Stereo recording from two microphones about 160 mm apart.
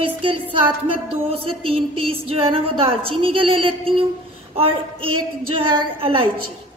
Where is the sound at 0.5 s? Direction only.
35° right (ahead or behind).